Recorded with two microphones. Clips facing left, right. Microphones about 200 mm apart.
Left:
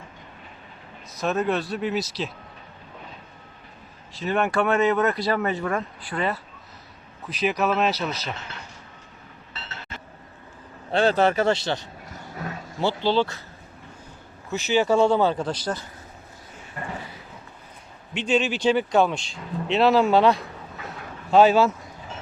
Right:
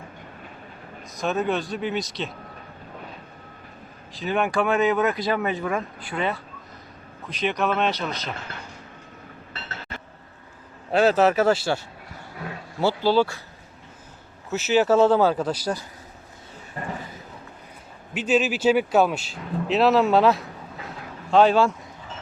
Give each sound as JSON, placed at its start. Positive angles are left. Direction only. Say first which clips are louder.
{"t": 1.2, "sound": "speech", "louder": "even", "side_deg": 0}
{"t": 4.1, "sound": "speech", "louder": "even", "side_deg": 0}
{"t": 10.9, "sound": "speech", "louder": "right 2 dB", "side_deg": -5}
{"t": 12.4, "sound": "roaring cats", "louder": "left 1 dB", "side_deg": 45}
{"t": 12.8, "sound": "speech", "louder": "right 2 dB", "side_deg": -5}
{"t": 14.5, "sound": "speech", "louder": "right 2 dB", "side_deg": -5}
{"t": 16.8, "sound": "speech", "louder": "right 2 dB", "side_deg": -35}
{"t": 18.1, "sound": "speech", "louder": "right 1 dB", "side_deg": -5}